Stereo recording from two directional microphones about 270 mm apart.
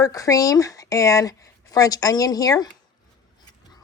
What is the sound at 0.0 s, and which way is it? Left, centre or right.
A woman's voice, centre.